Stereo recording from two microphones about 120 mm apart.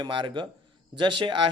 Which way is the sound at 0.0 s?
45° right (ahead or behind).